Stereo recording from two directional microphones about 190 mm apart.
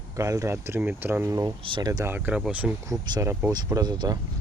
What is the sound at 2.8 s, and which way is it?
Speech, 15° right (ahead or behind).